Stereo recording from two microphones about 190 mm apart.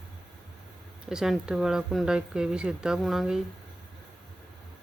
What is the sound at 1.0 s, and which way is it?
Speech, 5° right (ahead or behind).